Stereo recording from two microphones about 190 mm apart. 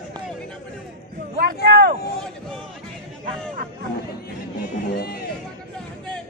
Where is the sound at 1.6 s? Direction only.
60° right (ahead or behind).